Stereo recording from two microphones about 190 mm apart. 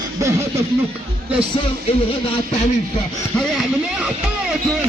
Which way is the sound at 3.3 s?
Centre (ahead or behind).